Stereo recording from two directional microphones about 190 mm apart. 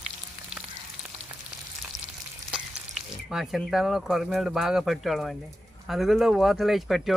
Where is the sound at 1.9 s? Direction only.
20° right (ahead or behind).